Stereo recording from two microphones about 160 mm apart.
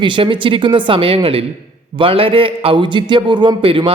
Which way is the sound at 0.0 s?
30° right (ahead or behind).